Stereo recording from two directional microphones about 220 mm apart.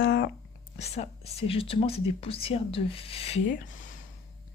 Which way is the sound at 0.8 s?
30° left (ahead or behind).